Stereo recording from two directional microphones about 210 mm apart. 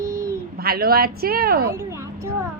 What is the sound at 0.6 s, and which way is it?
Speech, 45° right (ahead or behind).